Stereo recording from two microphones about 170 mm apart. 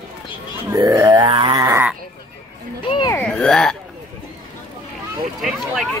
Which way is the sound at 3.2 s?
5° left (ahead or behind).